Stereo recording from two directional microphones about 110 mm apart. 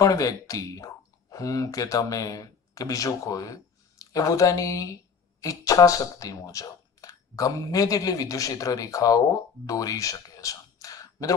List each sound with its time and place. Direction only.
0.0 s speech: 30° left (ahead or behind)